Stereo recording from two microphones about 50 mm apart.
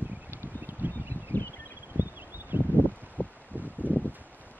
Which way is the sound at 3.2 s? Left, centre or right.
Left.